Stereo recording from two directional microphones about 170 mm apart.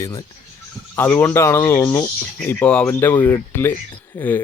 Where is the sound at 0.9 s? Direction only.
10° left (ahead or behind).